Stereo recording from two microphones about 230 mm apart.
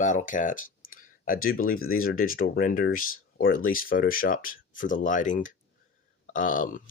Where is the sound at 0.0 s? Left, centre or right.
Left.